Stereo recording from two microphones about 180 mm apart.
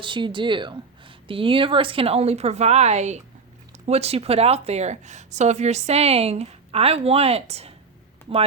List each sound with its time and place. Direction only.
0.0 s a woman's voice: 25° right (ahead or behind)